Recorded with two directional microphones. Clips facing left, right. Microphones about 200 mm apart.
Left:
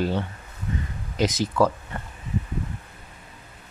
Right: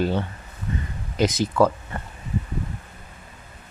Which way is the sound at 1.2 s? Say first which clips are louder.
Right 2 dB; 55° right (ahead or behind).